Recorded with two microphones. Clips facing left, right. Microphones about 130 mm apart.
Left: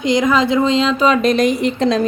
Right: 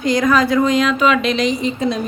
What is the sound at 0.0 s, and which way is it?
Speech, 20° left (ahead or behind).